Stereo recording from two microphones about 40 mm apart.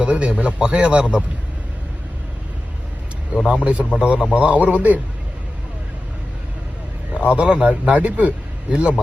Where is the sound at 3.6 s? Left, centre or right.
Right.